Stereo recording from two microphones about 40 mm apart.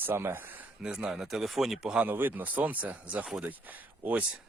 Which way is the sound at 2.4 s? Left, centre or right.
Right.